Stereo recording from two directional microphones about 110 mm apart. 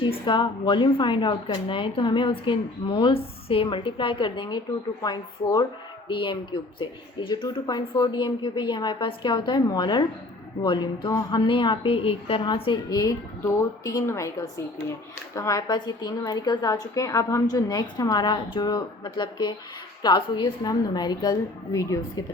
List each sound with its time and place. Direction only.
0.0 s a woman's voice: 45° left (ahead or behind)
12.9 s a woman's voice: 35° left (ahead or behind)